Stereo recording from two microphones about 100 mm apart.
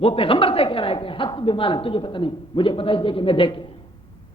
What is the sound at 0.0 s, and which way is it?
A woman's voice, 65° left (ahead or behind).